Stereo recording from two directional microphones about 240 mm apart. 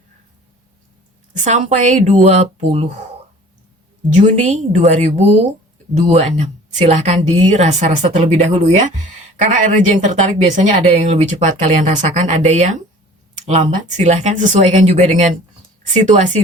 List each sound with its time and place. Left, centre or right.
1.5 s speech: right
4.2 s speech: right